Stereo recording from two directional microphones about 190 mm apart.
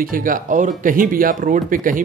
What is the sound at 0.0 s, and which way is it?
Speech, 45° right (ahead or behind).